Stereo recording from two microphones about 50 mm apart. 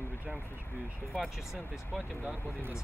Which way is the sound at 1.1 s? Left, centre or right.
Centre.